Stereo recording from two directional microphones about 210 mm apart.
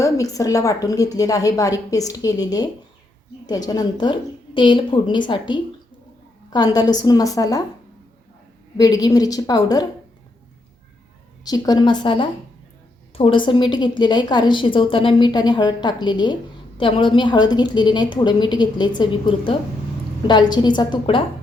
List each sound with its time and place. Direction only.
0.0 s a woman's voice: 15° left (ahead or behind)
8.8 s a woman's voice: 15° left (ahead or behind)
11.4 s a woman's voice: 20° left (ahead or behind)